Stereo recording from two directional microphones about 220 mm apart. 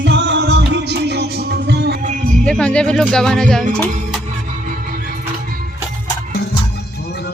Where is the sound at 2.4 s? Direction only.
5° left (ahead or behind).